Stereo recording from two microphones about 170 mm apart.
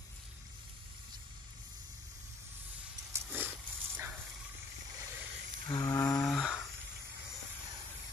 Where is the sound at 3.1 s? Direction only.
15° right (ahead or behind).